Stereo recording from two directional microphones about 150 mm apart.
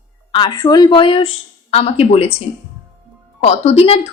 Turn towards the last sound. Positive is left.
turn(degrees=40)  # may be behind; listen again after turning